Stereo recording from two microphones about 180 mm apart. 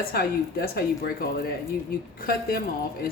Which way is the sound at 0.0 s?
55° left (ahead or behind).